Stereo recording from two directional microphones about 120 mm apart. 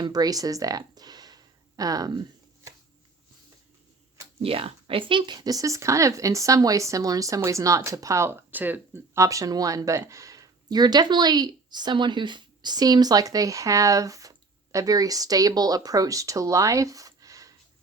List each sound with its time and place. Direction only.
0.0 s speech: 35° right (ahead or behind)
4.4 s speech: 50° right (ahead or behind); by 17.5 s 30° right (ahead or behind)